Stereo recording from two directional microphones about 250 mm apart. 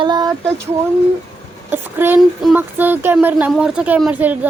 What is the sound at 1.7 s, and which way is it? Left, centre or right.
A woman's voice, centre.